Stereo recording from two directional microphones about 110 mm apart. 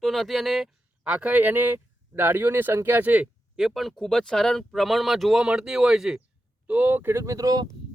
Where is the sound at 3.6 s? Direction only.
Centre (ahead or behind).